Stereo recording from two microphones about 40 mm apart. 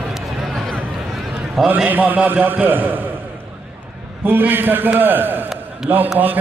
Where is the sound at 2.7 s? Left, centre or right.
Right.